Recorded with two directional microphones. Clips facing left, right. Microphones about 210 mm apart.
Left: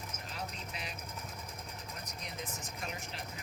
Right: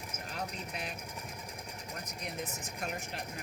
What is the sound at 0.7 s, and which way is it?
Vehicle, 50° right (ahead or behind).